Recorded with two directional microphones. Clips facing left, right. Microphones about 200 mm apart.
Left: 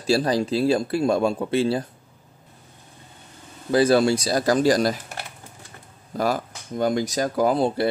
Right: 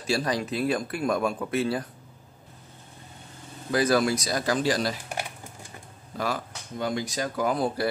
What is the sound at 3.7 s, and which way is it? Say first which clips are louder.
Speech: left 5 dB; 30° left (ahead or behind).